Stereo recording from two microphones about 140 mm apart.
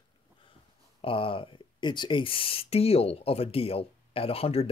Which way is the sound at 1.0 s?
40° left (ahead or behind).